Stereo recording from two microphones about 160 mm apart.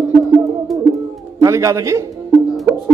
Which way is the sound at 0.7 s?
Centre (ahead or behind).